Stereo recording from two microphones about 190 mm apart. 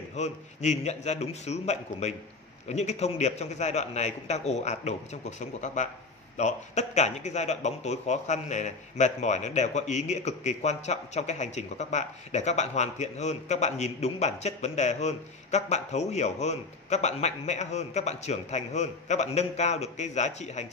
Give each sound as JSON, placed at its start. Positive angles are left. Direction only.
{"t": 0.1, "sound": "speech", "side_deg": 35}